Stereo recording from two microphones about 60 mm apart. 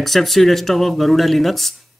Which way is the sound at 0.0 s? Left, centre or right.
Centre.